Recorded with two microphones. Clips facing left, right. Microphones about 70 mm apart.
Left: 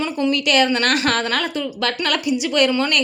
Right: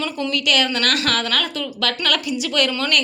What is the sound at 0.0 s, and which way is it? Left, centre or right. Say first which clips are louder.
A woman's voice: left 3 dB; left.